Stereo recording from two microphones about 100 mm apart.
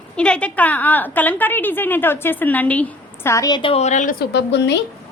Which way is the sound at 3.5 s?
55° left (ahead or behind).